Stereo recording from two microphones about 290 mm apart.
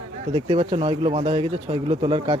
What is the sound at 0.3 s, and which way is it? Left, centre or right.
Speech, centre.